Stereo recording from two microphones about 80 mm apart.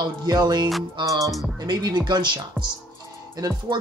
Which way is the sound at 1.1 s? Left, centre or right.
Right.